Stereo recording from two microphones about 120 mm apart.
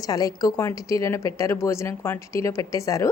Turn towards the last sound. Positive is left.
turn(degrees=25)  # may be behind; listen again after turning